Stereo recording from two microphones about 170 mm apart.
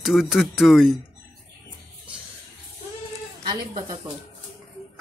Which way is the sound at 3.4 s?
25° right (ahead or behind).